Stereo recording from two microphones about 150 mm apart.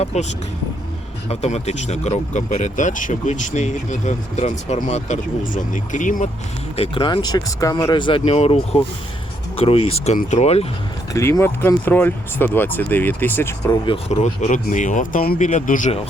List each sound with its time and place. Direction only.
0.0 s speech: 45° left (ahead or behind)
1.3 s speech: 45° left (ahead or behind)
6.7 s speech: 35° left (ahead or behind); by 7.9 s 20° left (ahead or behind)
7.9 s speech: 35° left (ahead or behind)
11.1 s speech: 20° left (ahead or behind)
14.1 s speech: 50° left (ahead or behind); by 15.4 s 70° left (ahead or behind)
15.4 s speech: 55° left (ahead or behind)